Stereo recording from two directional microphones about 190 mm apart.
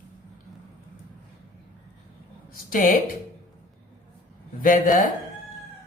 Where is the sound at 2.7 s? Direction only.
45° left (ahead or behind).